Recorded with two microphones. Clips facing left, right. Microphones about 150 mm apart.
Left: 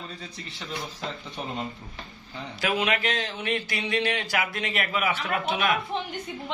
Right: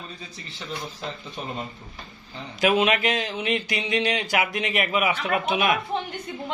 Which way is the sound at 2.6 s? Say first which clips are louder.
Right 5 dB; 20° right (ahead or behind).